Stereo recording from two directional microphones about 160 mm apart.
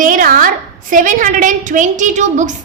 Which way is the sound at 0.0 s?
55° right (ahead or behind).